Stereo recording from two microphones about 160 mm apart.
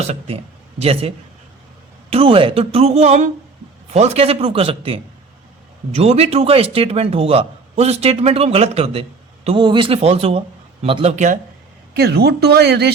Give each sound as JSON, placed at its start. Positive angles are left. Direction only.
{"t": 0.0, "sound": "a man's voice", "side_deg": -45}
{"t": 11.9, "sound": "speech", "side_deg": -80}